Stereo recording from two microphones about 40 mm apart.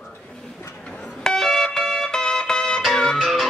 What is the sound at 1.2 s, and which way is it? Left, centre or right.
Music, centre.